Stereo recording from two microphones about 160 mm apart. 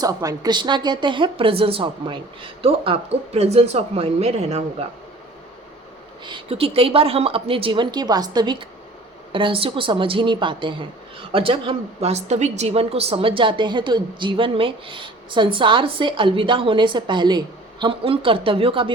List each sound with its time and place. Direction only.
0.0 s a woman's voice: 25° right (ahead or behind); by 4.9 s 40° right (ahead or behind)
6.2 s a woman's voice: 35° right (ahead or behind)